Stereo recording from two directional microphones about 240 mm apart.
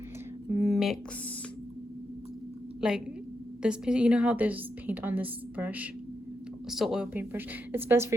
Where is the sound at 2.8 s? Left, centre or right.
Centre.